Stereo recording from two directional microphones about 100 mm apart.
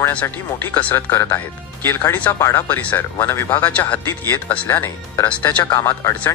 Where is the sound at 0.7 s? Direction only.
20° left (ahead or behind).